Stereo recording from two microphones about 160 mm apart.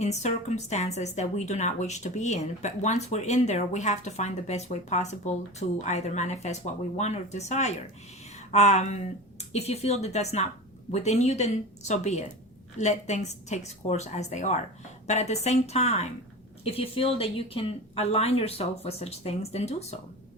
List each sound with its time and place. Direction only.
0.0 s a woman's voice: 45° left (ahead or behind)